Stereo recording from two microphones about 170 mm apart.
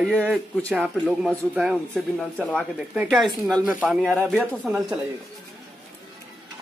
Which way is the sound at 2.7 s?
5° right (ahead or behind).